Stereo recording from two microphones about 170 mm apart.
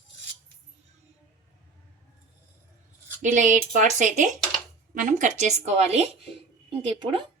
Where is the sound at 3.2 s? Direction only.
45° right (ahead or behind); by 7.2 s 30° right (ahead or behind).